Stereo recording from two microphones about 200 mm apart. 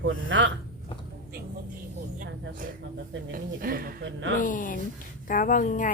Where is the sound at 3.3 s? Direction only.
45° right (ahead or behind).